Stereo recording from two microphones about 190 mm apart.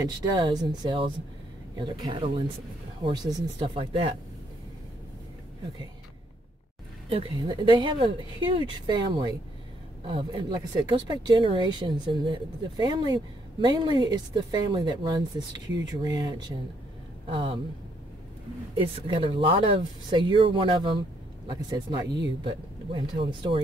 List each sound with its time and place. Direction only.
0.0 s speech: 20° right (ahead or behind)
7.1 s speech: 30° right (ahead or behind)
18.8 s speech: 25° right (ahead or behind)